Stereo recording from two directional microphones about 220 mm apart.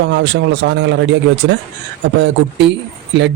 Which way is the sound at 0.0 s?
50° right (ahead or behind).